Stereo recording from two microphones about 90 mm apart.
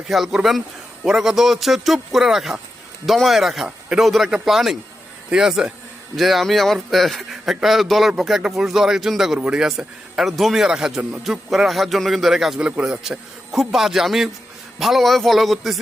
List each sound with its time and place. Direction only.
0.1 s a man's voice: centre (ahead or behind)
12.5 s a man's voice: 15° right (ahead or behind)